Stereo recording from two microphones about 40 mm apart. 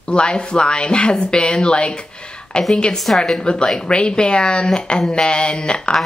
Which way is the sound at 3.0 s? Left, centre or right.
Centre.